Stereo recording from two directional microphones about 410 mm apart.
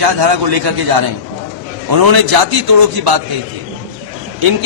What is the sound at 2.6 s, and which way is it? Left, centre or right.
Speech, right.